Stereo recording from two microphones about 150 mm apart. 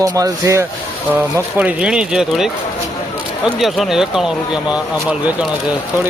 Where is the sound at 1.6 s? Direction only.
5° right (ahead or behind).